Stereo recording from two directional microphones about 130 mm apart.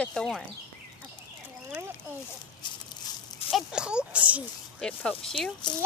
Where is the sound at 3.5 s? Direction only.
5° right (ahead or behind).